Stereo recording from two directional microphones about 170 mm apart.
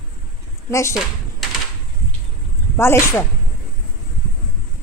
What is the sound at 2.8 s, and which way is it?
Speech, 15° left (ahead or behind).